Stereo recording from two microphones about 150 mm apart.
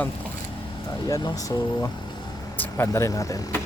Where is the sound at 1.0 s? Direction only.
25° left (ahead or behind).